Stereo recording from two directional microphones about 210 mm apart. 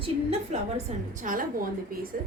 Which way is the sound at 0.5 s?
35° right (ahead or behind).